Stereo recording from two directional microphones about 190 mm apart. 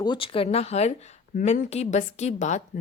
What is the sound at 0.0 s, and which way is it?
A woman's voice, 25° left (ahead or behind).